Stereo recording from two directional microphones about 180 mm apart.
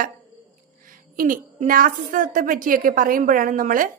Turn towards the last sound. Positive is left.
turn(degrees=-50)  # may be behind; listen again after turning